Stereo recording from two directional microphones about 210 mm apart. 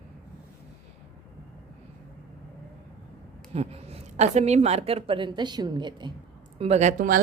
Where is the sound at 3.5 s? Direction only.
30° right (ahead or behind).